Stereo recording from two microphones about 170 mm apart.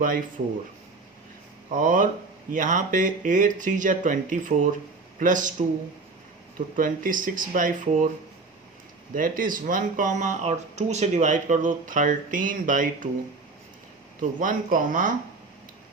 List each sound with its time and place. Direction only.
1.7 s speech: 50° right (ahead or behind)
6.7 s speech: 55° right (ahead or behind)
9.1 s speech: 55° right (ahead or behind)
14.2 s speech: 50° right (ahead or behind)